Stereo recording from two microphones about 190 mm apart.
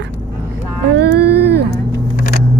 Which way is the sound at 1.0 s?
60° right (ahead or behind).